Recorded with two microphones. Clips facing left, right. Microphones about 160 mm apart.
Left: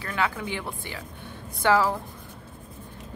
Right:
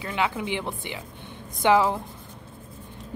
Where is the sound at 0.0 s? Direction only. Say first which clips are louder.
Right 1 dB; 20° right (ahead or behind).